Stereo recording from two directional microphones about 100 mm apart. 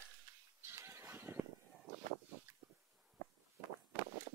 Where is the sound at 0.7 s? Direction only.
25° right (ahead or behind).